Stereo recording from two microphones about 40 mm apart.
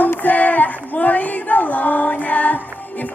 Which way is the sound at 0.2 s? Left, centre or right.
Left.